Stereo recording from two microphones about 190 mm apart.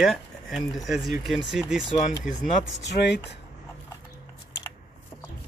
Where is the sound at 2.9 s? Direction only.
65° left (ahead or behind).